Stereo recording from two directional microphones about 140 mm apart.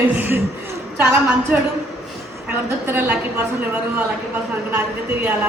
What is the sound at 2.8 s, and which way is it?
Speech, 15° right (ahead or behind).